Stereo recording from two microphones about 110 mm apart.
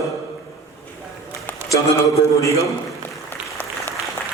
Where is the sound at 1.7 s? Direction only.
30° left (ahead or behind).